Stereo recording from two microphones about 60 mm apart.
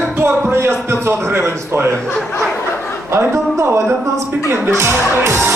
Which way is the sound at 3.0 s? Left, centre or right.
Right.